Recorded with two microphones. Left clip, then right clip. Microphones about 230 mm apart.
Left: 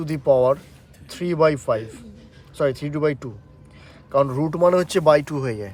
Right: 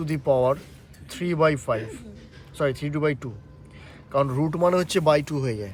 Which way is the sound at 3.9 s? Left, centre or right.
Centre.